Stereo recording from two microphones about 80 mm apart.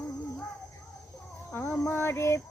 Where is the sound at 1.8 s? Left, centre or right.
Left.